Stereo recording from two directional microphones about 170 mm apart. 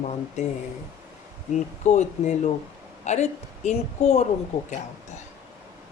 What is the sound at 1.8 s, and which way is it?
Speech, 45° left (ahead or behind).